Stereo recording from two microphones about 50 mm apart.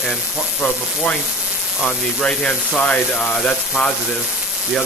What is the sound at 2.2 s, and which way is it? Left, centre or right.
Speech, centre.